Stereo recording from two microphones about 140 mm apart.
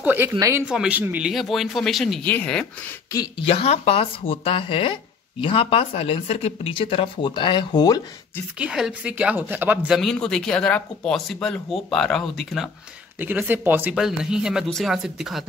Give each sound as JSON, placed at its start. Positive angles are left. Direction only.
{"t": 0.0, "sound": "speech", "side_deg": -15}
{"t": 0.7, "sound": "speech", "side_deg": -10}
{"t": 1.3, "sound": "speech", "side_deg": 0}
{"t": 2.2, "sound": "speech", "side_deg": 10}
{"t": 3.4, "sound": "speech", "side_deg": 45}
{"t": 8.5, "sound": "speech", "side_deg": -5}
{"t": 9.9, "sound": "speech", "side_deg": 5}
{"t": 13.2, "sound": "speech", "side_deg": -15}